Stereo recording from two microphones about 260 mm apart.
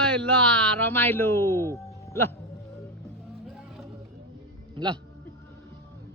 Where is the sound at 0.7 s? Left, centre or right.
Centre.